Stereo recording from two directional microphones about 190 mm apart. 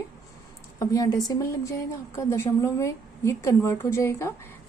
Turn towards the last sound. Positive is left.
turn(degrees=15)  # may be behind; listen again after turning